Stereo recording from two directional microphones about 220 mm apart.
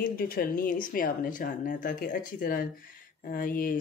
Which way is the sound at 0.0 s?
40° left (ahead or behind).